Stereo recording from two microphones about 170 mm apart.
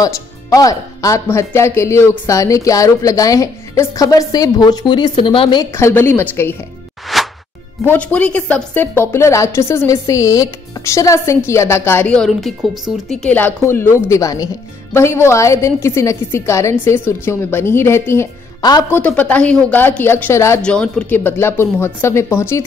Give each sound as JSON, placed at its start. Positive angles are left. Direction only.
{"t": 0.0, "sound": "speech", "side_deg": 20}
{"t": 5.7, "sound": "a woman's voice", "side_deg": 15}
{"t": 7.1, "sound": "a sound", "side_deg": 0}
{"t": 7.8, "sound": "a woman's voice", "side_deg": 10}
{"t": 20.6, "sound": "a woman's voice", "side_deg": 5}